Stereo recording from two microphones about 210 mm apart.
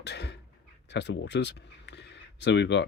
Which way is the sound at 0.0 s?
55° left (ahead or behind).